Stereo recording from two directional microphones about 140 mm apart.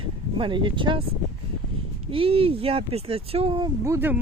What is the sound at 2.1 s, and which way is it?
Speech, 40° right (ahead or behind).